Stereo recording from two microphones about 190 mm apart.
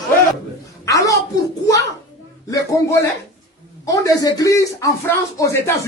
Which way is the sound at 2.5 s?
15° left (ahead or behind).